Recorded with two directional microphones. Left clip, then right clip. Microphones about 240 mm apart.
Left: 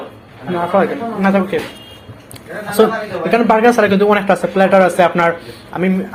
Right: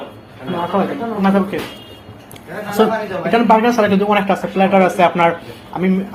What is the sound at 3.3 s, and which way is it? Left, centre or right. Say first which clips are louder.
Speech: left 2 dB; left.